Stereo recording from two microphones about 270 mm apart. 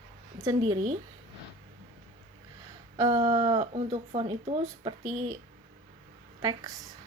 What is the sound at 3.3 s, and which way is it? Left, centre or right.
Speech, right.